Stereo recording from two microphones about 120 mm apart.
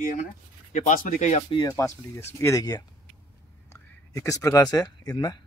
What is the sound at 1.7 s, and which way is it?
Speech, 25° left (ahead or behind).